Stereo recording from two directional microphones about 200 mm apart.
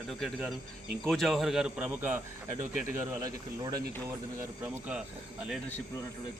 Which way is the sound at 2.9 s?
20° right (ahead or behind).